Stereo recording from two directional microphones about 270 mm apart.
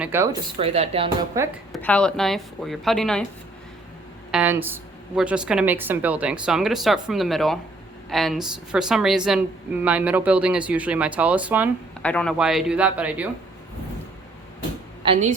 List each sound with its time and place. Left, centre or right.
0.0 s a sound: centre
0.6 s speech: right
1.7 s a woman's voice: centre
4.3 s a woman's voice: centre
15.0 s speech: right